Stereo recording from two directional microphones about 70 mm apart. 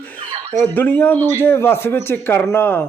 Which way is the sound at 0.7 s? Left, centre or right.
Left.